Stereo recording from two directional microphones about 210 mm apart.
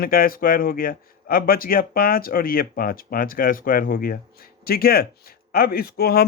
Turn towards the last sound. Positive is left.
turn(degrees=45)  # may be behind; listen again after turning